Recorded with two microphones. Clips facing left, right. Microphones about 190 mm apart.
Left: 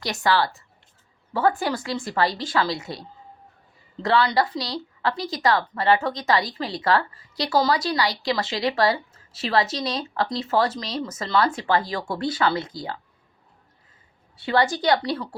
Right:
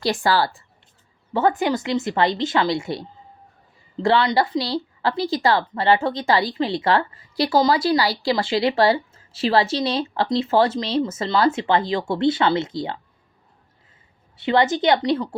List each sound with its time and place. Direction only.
0.0 s a woman's voice: 30° right (ahead or behind)
14.3 s speech: 20° right (ahead or behind)